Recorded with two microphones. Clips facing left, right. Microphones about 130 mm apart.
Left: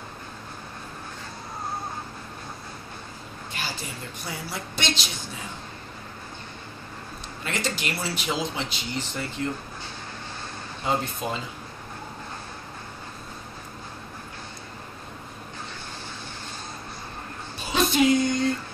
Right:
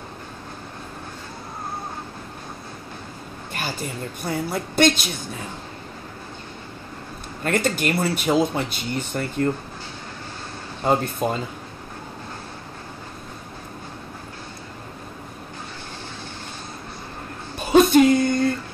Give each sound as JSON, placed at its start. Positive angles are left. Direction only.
{"t": 4.2, "sound": "speech", "side_deg": -55}
{"t": 7.4, "sound": "speech", "side_deg": -50}
{"t": 10.8, "sound": "speech", "side_deg": -50}
{"t": 17.6, "sound": "a sound", "side_deg": -50}